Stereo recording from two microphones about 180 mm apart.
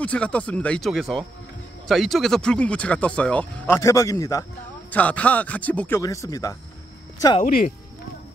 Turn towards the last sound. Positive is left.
turn(degrees=45)  # may be behind; listen again after turning